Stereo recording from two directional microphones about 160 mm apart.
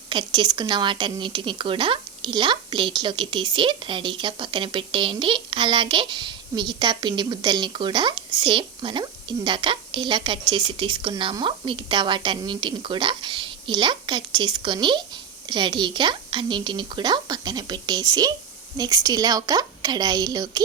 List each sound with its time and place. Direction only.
0.1 s speech: 30° right (ahead or behind)